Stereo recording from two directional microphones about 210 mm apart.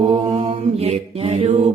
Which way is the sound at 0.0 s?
25° right (ahead or behind).